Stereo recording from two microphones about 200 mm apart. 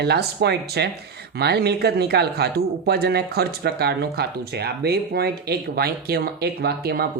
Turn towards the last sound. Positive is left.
turn(degrees=-50)  # may be behind; listen again after turning